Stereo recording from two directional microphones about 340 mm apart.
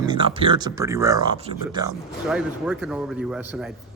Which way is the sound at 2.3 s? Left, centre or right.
Centre.